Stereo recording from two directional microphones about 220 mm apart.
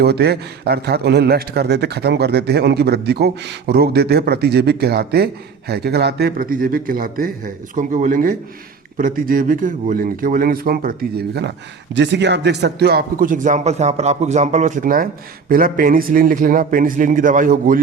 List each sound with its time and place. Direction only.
0.0 s a man's voice: 50° right (ahead or behind)